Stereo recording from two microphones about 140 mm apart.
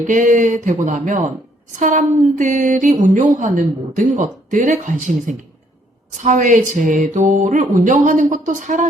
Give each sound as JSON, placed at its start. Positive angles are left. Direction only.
{"t": 0.1, "sound": "a woman's voice", "side_deg": -65}